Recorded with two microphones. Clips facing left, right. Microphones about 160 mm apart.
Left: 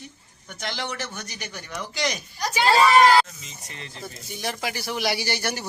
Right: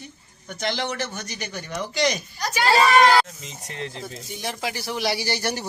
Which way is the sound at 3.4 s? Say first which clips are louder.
Right 8 dB; 80° right.